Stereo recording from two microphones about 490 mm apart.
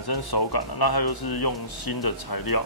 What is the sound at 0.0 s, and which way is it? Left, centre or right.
Speech, left.